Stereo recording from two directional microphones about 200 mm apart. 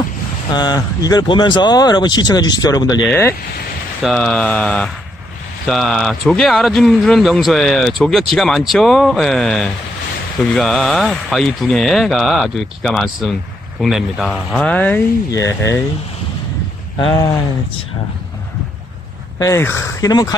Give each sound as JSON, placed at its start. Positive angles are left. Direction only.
{"t": 0.5, "sound": "speech", "side_deg": 20}
{"t": 4.0, "sound": "speech", "side_deg": 5}
{"t": 17.0, "sound": "speech", "side_deg": 20}
{"t": 19.3, "sound": "speech", "side_deg": 15}